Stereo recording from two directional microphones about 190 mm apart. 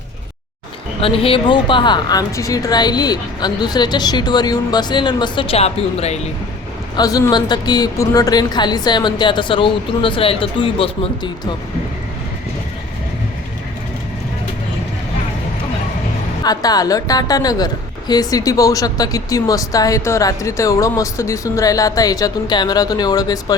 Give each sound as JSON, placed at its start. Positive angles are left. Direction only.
{"t": 1.0, "sound": "speech", "side_deg": 30}
{"t": 6.9, "sound": "speech", "side_deg": 20}
{"t": 16.4, "sound": "speech", "side_deg": 20}